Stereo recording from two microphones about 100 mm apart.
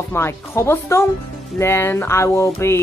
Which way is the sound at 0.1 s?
25° left (ahead or behind).